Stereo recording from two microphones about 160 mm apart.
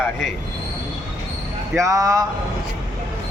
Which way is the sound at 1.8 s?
20° right (ahead or behind).